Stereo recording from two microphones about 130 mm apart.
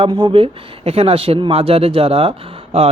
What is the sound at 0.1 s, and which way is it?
Speech, 35° right (ahead or behind).